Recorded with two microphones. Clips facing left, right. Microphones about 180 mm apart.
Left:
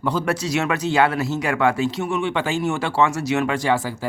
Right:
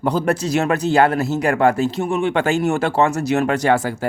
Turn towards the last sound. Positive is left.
turn(degrees=-45)  # may be behind; listen again after turning